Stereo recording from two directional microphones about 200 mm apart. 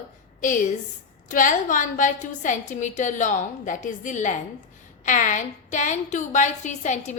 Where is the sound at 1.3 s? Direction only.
40° left (ahead or behind).